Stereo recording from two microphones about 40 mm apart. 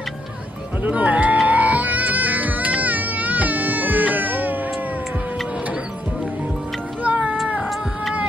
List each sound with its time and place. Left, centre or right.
0.8 s speech: right
1.5 s baby cry: right
7.0 s music: right